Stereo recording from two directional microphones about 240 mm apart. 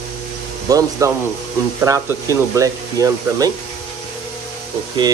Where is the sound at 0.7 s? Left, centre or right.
Centre.